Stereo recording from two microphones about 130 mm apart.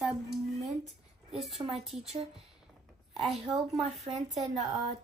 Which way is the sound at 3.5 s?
Centre (ahead or behind).